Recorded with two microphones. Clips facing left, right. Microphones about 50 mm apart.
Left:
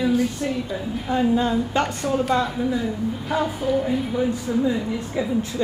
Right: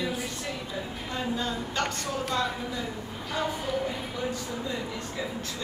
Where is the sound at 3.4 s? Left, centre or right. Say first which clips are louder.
Left 6 dB; centre.